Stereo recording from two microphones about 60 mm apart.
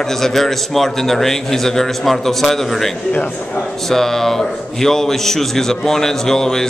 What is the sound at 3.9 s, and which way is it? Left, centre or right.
A man's voice, centre.